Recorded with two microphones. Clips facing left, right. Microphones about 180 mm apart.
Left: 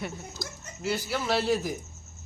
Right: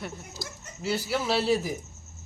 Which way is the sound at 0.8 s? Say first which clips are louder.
Right 2 dB; centre (ahead or behind).